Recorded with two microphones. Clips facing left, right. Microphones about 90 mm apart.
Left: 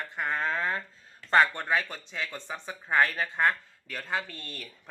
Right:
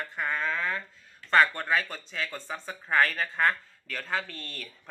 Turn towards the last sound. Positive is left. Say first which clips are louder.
# even
turn(degrees=10)  # may be behind; listen again after turning